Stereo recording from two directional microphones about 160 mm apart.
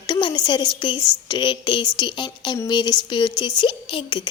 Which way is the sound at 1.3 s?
30° left (ahead or behind).